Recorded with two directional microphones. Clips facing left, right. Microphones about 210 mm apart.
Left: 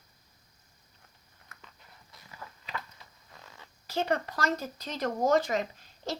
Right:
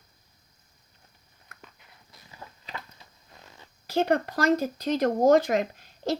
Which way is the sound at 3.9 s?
55° right (ahead or behind).